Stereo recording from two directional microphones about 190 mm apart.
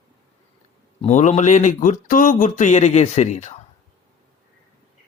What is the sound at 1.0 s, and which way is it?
Speech, 35° left (ahead or behind).